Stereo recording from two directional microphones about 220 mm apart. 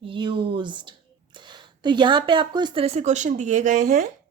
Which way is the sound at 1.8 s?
20° right (ahead or behind).